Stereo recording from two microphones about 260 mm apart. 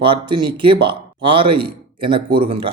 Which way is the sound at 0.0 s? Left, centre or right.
Centre.